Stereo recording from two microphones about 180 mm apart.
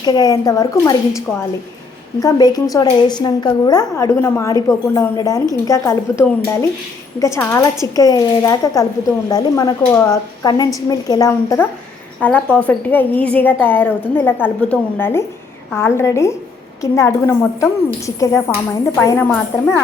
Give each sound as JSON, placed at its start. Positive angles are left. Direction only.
{"t": 0.0, "sound": "speech", "side_deg": 20}
{"t": 2.2, "sound": "a woman's voice", "side_deg": 20}